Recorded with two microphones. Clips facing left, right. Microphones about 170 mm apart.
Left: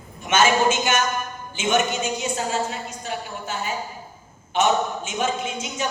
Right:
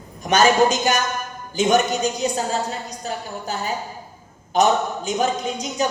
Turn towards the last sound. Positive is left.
turn(degrees=-40)  # may be behind; listen again after turning